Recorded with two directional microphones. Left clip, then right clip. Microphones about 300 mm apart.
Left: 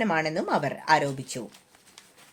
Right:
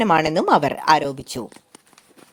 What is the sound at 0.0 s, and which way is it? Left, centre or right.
A woman's voice, right.